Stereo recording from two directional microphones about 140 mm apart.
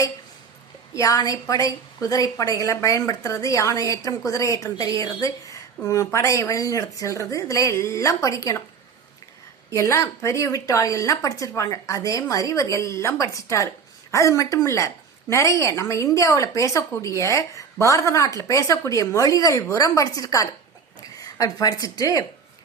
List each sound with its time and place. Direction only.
0.9 s a woman's voice: 25° left (ahead or behind)
9.7 s a woman's voice: 20° left (ahead or behind)